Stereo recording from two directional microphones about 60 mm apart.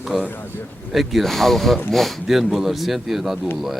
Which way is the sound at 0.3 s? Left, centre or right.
Left.